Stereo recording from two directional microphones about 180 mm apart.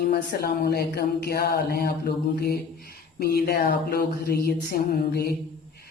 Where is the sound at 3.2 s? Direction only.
60° left (ahead or behind).